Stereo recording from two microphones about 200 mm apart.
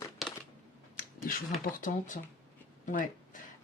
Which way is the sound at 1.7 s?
40° left (ahead or behind).